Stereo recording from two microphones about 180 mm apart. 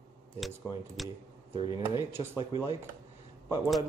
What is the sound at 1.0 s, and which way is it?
Speech, centre (ahead or behind).